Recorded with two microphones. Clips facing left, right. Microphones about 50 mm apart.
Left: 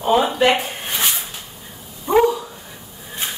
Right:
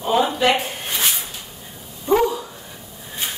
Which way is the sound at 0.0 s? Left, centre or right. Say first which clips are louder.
Left 2 dB; centre.